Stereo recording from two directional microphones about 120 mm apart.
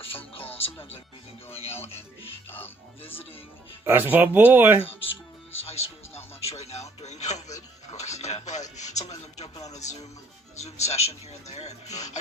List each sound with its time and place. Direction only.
0.3 s music: 50° left (ahead or behind)
1.5 s a man's voice: 55° left (ahead or behind)
3.8 s speech: 15° right (ahead or behind)
5.5 s a man's voice: 60° left (ahead or behind)